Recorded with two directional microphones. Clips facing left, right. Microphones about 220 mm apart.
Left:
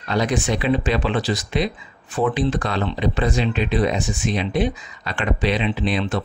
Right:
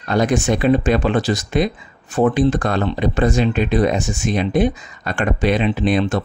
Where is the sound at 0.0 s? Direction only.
50° right (ahead or behind).